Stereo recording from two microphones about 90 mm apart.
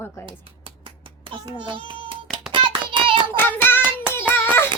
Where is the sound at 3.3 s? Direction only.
20° left (ahead or behind).